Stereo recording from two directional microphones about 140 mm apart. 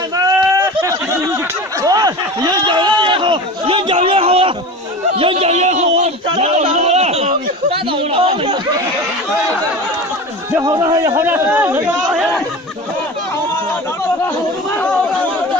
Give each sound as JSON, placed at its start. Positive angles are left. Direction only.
{"t": 0.2, "sound": "a sound", "side_deg": -20}
{"t": 10.6, "sound": "a man's voice", "side_deg": -25}
{"t": 11.3, "sound": "speech", "side_deg": -15}